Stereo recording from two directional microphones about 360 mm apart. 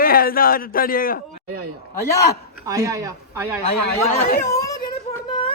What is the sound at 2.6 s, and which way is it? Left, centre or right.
Speech, centre.